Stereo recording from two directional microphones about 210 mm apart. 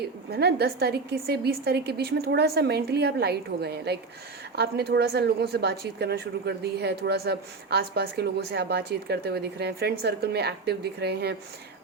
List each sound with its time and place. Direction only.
0.3 s speech: 50° right (ahead or behind)